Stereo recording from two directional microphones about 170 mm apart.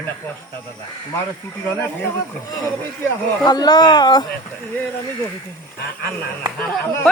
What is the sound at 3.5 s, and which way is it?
Speech, 25° left (ahead or behind).